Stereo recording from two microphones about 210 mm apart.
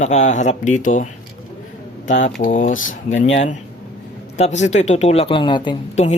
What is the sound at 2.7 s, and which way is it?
Speech, 70° left (ahead or behind).